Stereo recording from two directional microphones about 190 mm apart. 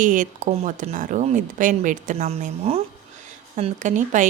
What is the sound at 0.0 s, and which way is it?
Speech, 45° right (ahead or behind).